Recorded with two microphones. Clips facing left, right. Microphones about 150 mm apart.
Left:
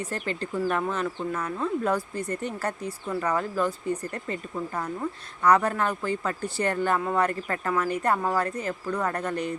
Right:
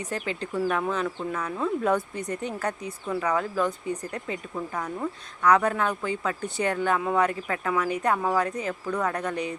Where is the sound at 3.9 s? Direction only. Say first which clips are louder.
Left 1 dB; 10° right (ahead or behind).